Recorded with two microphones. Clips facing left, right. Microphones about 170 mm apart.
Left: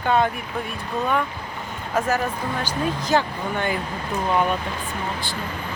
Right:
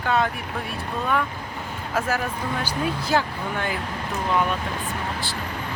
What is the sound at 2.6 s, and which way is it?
Speech, 10° right (ahead or behind).